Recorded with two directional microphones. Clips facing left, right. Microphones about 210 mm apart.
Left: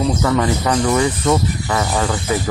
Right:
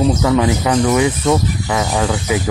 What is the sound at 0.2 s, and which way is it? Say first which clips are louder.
Speech: right 3 dB; 5° right (ahead or behind).